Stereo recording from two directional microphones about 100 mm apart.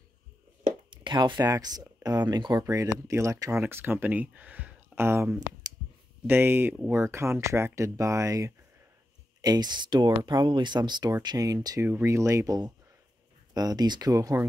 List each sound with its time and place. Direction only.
0.8 s a sound: 50° right (ahead or behind)
1.5 s speech: 40° right (ahead or behind)
2.6 s speech: 30° right (ahead or behind)
3.6 s speech: 20° right (ahead or behind)
9.4 s speech: 45° right (ahead or behind)